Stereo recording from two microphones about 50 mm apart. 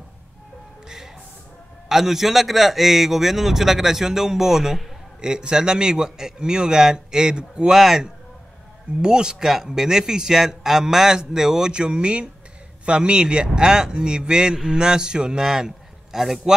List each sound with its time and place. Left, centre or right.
1.9 s a man's voice: centre
7.7 s a man's voice: centre